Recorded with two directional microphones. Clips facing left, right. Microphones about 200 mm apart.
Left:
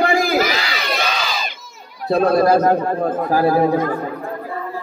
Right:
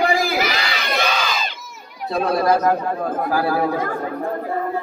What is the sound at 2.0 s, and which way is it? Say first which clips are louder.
Speech: left 4 dB; 35° left (ahead or behind).